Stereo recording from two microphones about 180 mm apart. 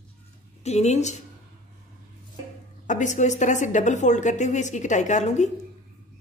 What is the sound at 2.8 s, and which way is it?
A woman's voice, 45° left (ahead or behind).